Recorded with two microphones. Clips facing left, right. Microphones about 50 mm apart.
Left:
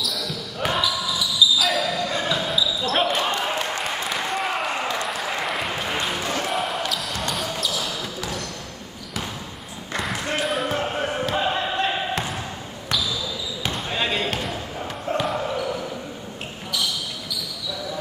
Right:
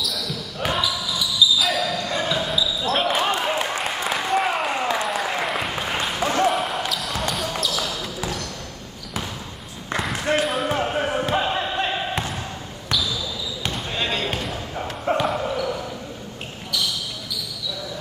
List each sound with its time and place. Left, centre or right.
0.0 s basketball bounce: centre
3.2 s a sound: centre
7.6 s basketball bounce: centre
9.9 s basketball bounce: centre
13.6 s basketball bounce: centre